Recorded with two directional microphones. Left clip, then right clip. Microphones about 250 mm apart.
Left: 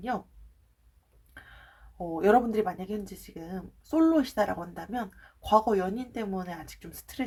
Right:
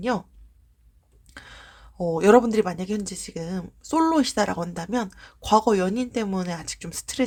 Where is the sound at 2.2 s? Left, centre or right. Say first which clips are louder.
Right 6 dB; right.